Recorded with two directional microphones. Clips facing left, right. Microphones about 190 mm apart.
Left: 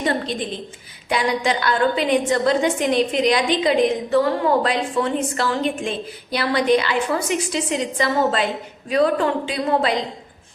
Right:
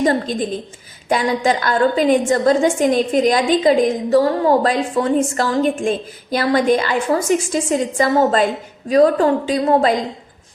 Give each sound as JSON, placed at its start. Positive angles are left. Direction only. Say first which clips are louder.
{"t": 0.0, "sound": "a woman's voice", "louder": "right 5 dB", "side_deg": -40}